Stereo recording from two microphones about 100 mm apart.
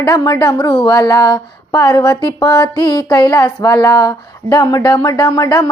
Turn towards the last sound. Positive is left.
turn(degrees=40)  # may be behind; listen again after turning